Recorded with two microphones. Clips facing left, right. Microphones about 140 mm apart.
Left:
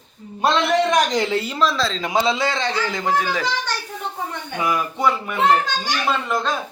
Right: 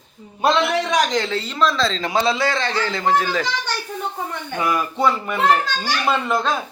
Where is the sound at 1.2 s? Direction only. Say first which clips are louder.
Left 3 dB; 15° left (ahead or behind).